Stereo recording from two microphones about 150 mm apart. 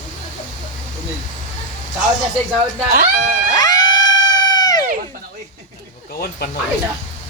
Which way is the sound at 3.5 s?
25° left (ahead or behind).